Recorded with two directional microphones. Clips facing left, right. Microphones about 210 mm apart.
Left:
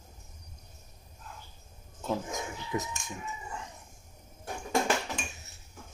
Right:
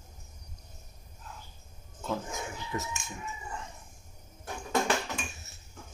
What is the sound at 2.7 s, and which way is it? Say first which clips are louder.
Speech: left 3 dB; 20° left (ahead or behind).